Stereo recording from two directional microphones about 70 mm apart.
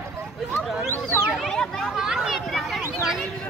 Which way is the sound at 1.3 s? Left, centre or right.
Centre.